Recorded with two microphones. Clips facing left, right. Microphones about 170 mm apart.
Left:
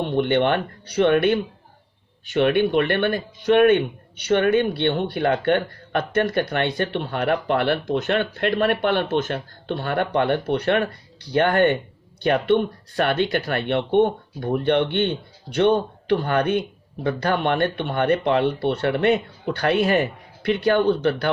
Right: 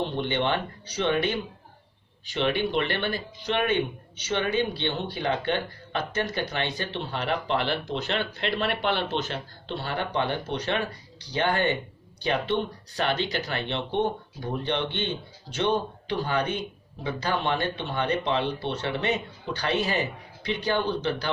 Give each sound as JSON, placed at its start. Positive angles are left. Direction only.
{"t": 0.0, "sound": "speech", "side_deg": 55}